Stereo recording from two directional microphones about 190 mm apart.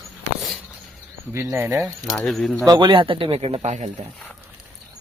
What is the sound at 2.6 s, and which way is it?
Speech, 20° right (ahead or behind).